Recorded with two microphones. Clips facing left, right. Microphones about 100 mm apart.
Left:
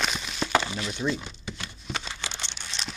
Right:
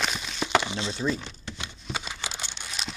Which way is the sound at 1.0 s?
5° left (ahead or behind).